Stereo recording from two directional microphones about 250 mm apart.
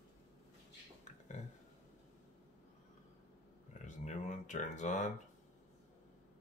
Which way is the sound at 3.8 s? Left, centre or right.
Left.